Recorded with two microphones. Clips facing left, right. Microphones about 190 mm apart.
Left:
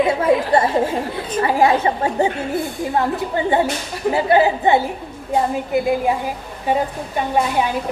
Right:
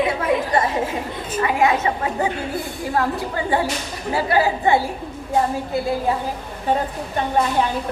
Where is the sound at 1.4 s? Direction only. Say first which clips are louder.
Left 3 dB; 35° left (ahead or behind).